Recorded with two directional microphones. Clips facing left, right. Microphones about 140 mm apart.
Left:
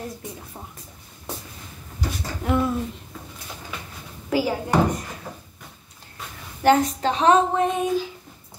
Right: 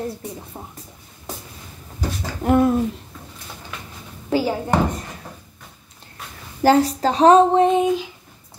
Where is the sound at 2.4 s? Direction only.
50° right (ahead or behind).